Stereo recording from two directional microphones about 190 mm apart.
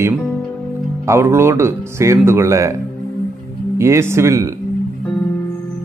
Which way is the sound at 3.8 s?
15° right (ahead or behind).